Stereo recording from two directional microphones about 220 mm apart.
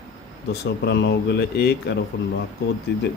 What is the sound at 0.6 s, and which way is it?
Speech, 50° left (ahead or behind).